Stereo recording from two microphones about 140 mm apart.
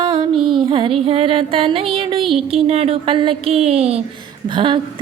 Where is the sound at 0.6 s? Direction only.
35° right (ahead or behind).